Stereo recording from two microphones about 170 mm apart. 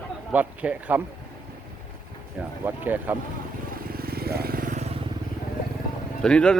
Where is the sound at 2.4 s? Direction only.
10° right (ahead or behind).